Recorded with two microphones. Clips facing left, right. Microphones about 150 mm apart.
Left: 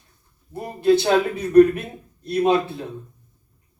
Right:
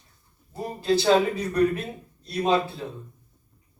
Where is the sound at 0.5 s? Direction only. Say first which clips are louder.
Left 6 dB; 55° left (ahead or behind).